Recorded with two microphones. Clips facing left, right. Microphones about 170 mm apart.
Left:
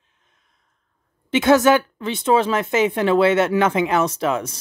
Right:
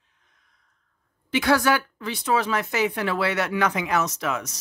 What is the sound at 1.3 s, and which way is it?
A woman's voice, 25° left (ahead or behind).